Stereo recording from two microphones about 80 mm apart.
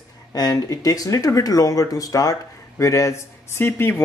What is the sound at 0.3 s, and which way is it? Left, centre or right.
Speech, left.